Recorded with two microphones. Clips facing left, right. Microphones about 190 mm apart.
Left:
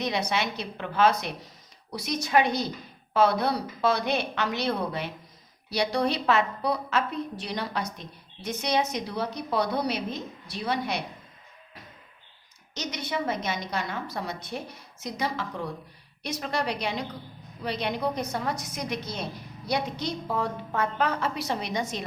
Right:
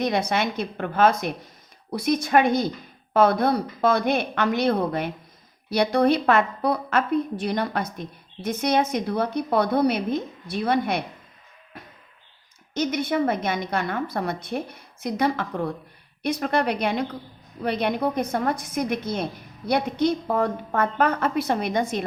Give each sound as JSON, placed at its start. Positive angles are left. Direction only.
{"t": 0.0, "sound": "a woman's voice", "side_deg": -50}
{"t": 12.7, "sound": "a woman's voice", "side_deg": -55}